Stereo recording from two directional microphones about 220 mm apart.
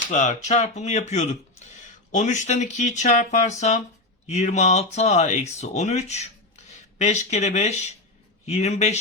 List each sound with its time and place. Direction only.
0.1 s speech: 35° left (ahead or behind)